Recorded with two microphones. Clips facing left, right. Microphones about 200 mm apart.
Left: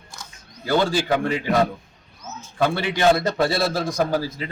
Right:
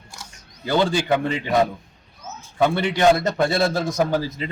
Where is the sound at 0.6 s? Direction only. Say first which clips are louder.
Even; 20° right (ahead or behind).